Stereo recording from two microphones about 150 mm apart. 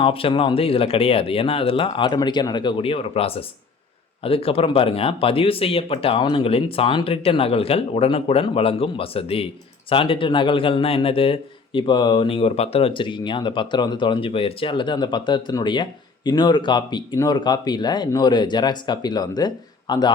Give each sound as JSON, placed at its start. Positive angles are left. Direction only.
{"t": 0.0, "sound": "a man's voice", "side_deg": 35}